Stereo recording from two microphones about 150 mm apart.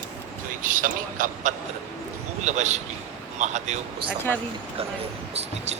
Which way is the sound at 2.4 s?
50° right (ahead or behind).